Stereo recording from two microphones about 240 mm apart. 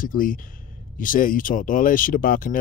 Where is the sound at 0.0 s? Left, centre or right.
Left.